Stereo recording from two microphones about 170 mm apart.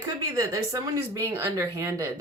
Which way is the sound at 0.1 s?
20° right (ahead or behind).